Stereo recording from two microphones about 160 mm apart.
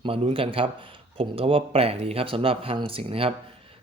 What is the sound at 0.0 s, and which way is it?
A man's voice, 35° right (ahead or behind).